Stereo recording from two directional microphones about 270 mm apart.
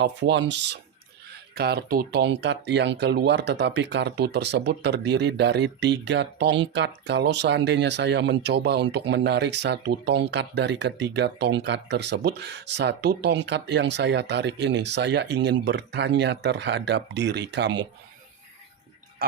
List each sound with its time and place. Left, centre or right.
0.0 s speech: right